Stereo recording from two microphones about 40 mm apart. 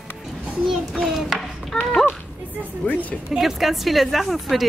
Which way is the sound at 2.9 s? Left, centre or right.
Left.